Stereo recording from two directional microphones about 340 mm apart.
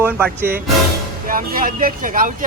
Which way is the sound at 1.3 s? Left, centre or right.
Right.